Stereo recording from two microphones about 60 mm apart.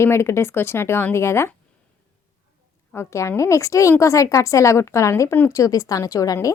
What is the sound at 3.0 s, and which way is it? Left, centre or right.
A woman's voice, left.